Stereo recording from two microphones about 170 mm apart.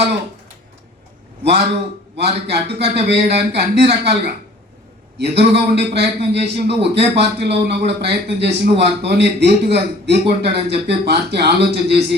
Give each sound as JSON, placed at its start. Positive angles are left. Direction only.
{"t": 2.1, "sound": "a man's voice", "side_deg": -75}
{"t": 5.4, "sound": "a man's voice", "side_deg": -75}